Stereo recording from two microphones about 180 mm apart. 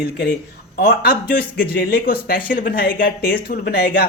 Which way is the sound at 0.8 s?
55° left (ahead or behind).